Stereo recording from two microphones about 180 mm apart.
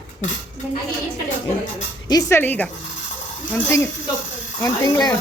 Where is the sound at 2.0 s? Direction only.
20° left (ahead or behind).